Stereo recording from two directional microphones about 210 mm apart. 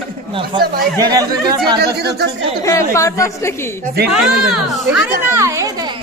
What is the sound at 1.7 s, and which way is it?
Speech, 50° right (ahead or behind).